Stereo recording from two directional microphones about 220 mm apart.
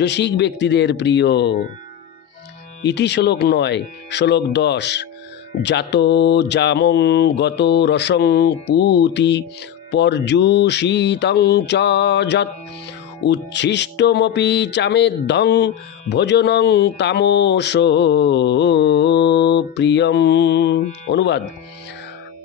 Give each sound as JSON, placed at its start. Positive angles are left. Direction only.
{"t": 0.0, "sound": "speech", "side_deg": 50}
{"t": 2.8, "sound": "speech", "side_deg": 50}